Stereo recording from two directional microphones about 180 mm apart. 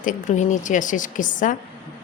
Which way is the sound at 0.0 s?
45° left (ahead or behind).